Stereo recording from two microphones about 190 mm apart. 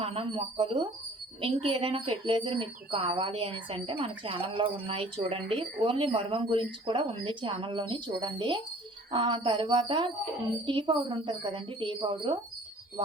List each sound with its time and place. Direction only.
0.0 s speech: 30° right (ahead or behind)